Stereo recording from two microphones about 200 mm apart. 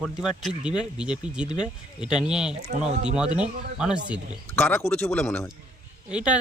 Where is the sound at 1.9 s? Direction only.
5° right (ahead or behind).